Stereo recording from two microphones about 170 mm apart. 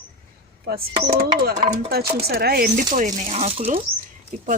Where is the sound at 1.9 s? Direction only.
65° right (ahead or behind); by 3.8 s 40° right (ahead or behind).